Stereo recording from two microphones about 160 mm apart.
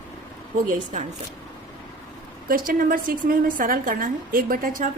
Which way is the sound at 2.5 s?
65° right (ahead or behind).